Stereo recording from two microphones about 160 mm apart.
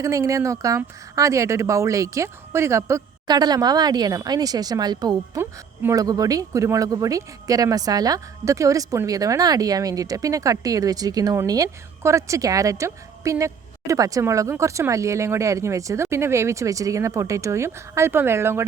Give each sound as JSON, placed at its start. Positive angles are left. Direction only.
{"t": 0.0, "sound": "speech", "side_deg": -20}